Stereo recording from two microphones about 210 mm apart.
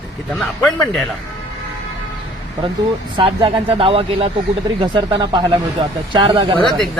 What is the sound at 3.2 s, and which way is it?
Speech, 25° right (ahead or behind).